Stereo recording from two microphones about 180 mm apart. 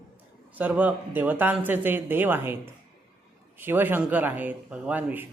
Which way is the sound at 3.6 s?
10° right (ahead or behind).